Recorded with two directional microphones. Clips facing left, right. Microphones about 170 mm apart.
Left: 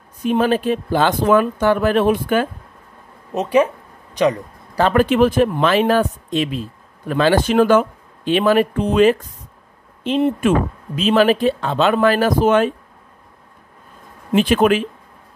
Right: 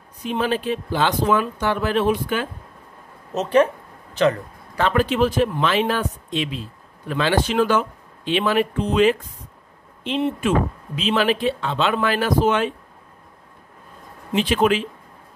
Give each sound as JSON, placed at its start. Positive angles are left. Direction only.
{"t": 0.2, "sound": "speech", "side_deg": 50}
{"t": 3.3, "sound": "speech", "side_deg": 10}
{"t": 4.9, "sound": "speech", "side_deg": 55}
{"t": 14.3, "sound": "speech", "side_deg": 50}